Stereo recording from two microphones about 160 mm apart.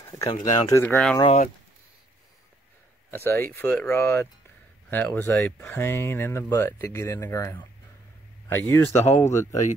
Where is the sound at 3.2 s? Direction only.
15° left (ahead or behind).